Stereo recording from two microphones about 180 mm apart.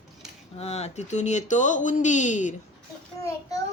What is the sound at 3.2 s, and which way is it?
Speech, 15° left (ahead or behind).